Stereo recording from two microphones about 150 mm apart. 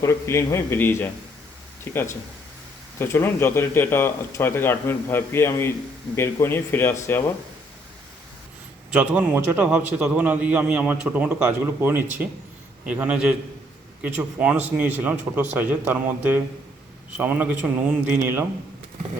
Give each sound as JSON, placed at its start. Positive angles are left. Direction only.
{"t": 0.0, "sound": "speech", "side_deg": 20}
{"t": 8.9, "sound": "a man's voice", "side_deg": -5}